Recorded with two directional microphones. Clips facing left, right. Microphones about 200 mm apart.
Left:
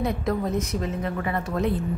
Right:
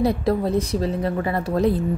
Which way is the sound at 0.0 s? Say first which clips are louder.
Right 5 dB; 35° right (ahead or behind).